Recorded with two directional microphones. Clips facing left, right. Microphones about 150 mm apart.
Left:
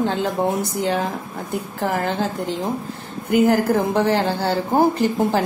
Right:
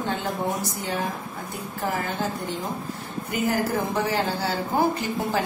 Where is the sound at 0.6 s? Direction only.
65° left (ahead or behind).